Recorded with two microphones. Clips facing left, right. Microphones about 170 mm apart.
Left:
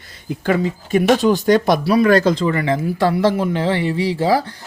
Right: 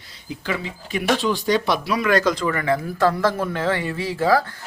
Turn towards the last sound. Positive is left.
turn(degrees=25)  # may be behind; listen again after turning